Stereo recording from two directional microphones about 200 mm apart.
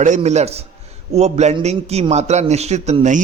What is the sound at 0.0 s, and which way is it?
A man's voice, 35° right (ahead or behind).